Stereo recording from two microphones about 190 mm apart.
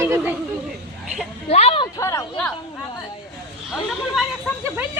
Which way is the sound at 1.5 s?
30° left (ahead or behind).